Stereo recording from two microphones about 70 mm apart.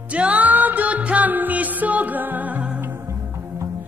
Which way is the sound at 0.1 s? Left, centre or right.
Right.